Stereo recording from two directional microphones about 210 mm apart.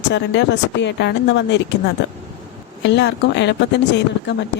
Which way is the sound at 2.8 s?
55° left (ahead or behind).